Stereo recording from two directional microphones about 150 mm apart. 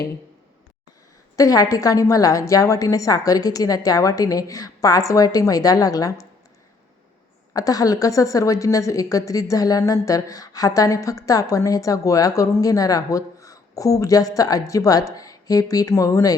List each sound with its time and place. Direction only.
1.4 s a woman's voice: 25° left (ahead or behind)
7.5 s a woman's voice: 25° left (ahead or behind)